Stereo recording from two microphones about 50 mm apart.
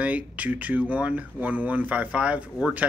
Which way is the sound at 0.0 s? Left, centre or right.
Right.